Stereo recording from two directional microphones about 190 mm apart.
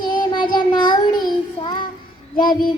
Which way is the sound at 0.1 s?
25° left (ahead or behind).